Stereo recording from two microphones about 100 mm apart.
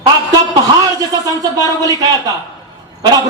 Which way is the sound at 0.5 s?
35° right (ahead or behind).